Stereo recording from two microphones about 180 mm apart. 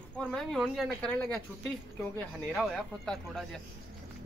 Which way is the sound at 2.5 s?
Centre (ahead or behind).